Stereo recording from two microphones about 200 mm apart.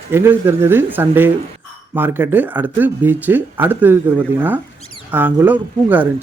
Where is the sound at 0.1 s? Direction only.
10° right (ahead or behind).